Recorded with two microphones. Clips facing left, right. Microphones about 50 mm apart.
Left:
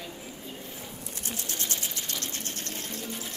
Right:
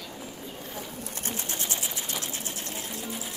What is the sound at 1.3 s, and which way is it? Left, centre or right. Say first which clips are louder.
Pigeon: right 2 dB; right.